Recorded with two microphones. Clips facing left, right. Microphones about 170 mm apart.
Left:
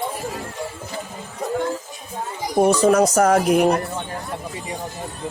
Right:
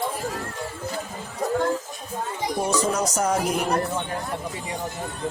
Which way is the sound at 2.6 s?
60° left (ahead or behind).